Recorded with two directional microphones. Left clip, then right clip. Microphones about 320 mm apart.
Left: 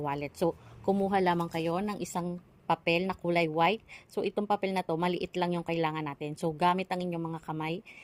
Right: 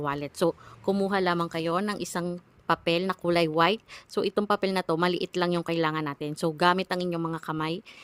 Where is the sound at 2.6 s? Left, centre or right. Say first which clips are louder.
Right 3 dB; right.